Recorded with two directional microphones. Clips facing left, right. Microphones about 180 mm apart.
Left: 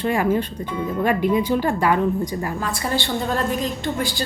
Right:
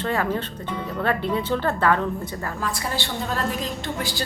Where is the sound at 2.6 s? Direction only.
Centre (ahead or behind).